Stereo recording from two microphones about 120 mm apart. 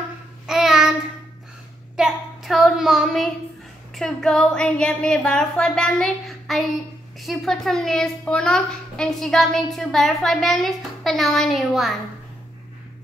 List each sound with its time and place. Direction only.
0.5 s child singing: 5° right (ahead or behind)
2.0 s a sound: 5° right (ahead or behind)
3.9 s a child's voice: 5° left (ahead or behind)